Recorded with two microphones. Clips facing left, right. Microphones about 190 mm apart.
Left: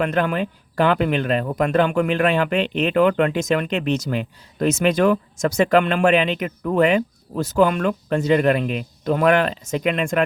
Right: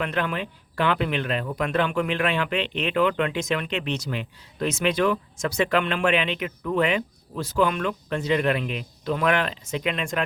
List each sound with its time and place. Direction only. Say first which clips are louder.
0.0 s speech: left 6 dB; 45° left (ahead or behind)